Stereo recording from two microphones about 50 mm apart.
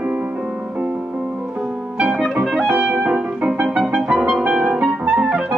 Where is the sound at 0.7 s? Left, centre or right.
Right.